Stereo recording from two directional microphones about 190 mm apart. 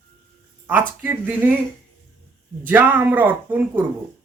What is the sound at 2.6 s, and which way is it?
Speech, 10° right (ahead or behind).